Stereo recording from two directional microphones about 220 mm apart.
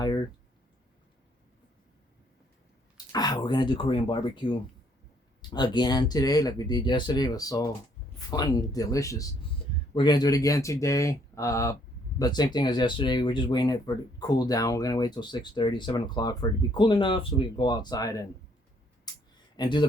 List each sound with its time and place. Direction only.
3.1 s speech: 20° left (ahead or behind)
19.1 s a sound: 20° left (ahead or behind)
19.5 s speech: 20° left (ahead or behind)